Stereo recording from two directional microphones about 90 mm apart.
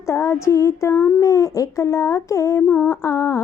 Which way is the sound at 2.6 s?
25° left (ahead or behind).